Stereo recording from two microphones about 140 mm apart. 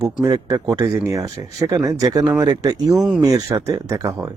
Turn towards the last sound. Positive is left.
turn(degrees=-25)  # may be behind; listen again after turning